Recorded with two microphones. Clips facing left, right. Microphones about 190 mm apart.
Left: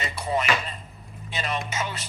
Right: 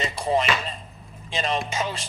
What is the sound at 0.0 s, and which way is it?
A man's voice, 30° right (ahead or behind).